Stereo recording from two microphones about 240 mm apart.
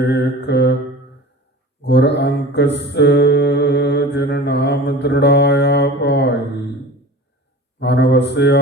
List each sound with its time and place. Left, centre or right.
0.0 s mantra: left
1.8 s mantra: left
7.8 s speech: left